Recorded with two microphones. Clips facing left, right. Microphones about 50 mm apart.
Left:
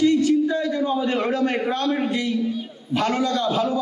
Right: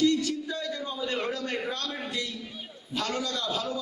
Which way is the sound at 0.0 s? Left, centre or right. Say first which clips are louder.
Left 8 dB; left.